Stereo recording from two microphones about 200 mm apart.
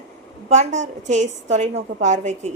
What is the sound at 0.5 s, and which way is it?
A woman's voice, 35° right (ahead or behind).